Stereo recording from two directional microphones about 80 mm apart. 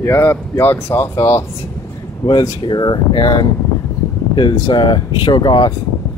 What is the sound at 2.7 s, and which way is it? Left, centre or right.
Speech, left.